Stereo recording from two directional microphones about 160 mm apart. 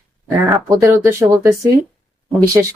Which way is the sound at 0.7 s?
20° right (ahead or behind).